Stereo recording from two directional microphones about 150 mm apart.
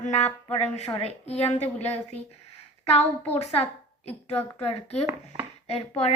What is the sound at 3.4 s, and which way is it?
A woman's voice, 45° left (ahead or behind).